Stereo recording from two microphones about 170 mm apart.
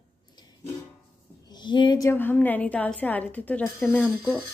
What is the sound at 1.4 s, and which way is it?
Speech, 25° left (ahead or behind).